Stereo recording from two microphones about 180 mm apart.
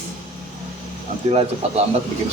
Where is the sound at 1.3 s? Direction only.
35° right (ahead or behind).